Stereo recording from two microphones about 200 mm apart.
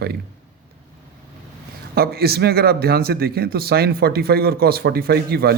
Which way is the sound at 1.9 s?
50° right (ahead or behind).